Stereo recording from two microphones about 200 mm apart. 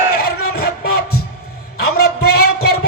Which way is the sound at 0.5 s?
50° left (ahead or behind).